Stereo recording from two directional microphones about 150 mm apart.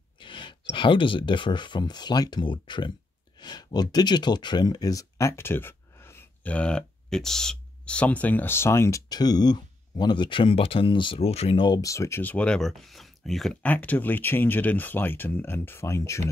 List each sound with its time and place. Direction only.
0.2 s speech: 35° left (ahead or behind)